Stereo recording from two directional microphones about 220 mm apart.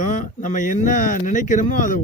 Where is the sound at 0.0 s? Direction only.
35° left (ahead or behind).